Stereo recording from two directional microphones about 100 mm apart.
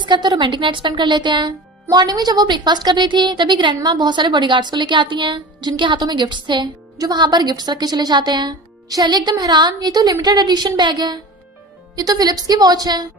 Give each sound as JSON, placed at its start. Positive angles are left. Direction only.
{"t": 0.0, "sound": "a woman's voice", "side_deg": -50}